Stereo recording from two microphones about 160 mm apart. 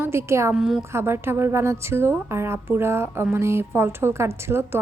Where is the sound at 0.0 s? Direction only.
15° right (ahead or behind).